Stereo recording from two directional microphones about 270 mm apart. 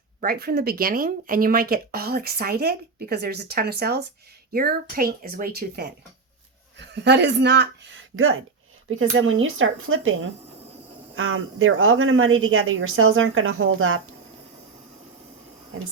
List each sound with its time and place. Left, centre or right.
0.2 s speech: right